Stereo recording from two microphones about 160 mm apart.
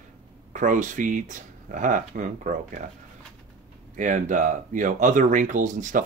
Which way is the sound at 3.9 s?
55° right (ahead or behind).